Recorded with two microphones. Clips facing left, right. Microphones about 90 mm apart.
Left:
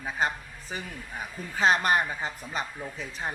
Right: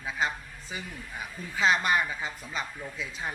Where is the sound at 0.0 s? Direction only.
45° left (ahead or behind).